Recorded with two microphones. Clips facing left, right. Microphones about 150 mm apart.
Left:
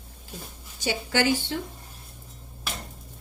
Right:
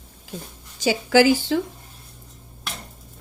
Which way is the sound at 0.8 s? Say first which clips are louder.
Right 9 dB; 90° right.